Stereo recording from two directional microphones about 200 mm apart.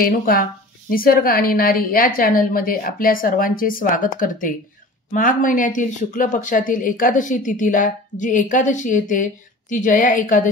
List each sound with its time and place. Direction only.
0.0 s a woman's voice: 45° left (ahead or behind)